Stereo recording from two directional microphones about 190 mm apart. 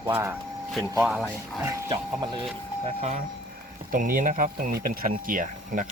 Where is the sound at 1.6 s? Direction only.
15° right (ahead or behind).